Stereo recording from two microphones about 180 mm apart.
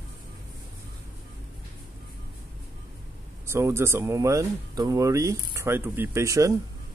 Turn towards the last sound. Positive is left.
turn(degrees=-20)  # may be behind; listen again after turning